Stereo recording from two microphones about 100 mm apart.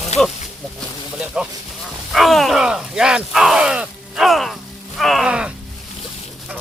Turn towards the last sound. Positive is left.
turn(degrees=-10)  # may be behind; listen again after turning